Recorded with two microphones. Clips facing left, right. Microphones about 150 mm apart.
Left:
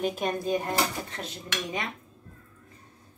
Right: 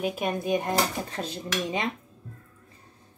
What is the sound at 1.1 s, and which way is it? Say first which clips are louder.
Dishes: right 5 dB; 30° right (ahead or behind).